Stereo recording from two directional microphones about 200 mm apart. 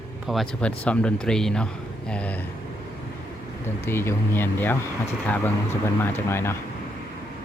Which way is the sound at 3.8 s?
10° left (ahead or behind).